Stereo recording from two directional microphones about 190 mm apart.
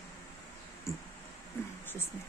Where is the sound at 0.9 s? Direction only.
15° left (ahead or behind).